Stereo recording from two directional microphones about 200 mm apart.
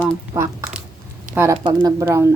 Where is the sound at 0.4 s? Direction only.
15° right (ahead or behind).